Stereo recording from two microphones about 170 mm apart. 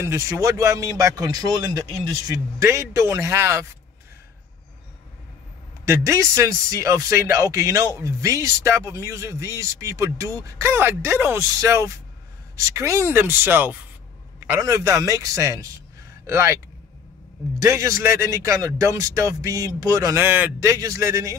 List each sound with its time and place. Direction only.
0.0 s speech: 20° right (ahead or behind)
5.9 s a man's voice: 15° right (ahead or behind)
17.6 s speech: 20° right (ahead or behind)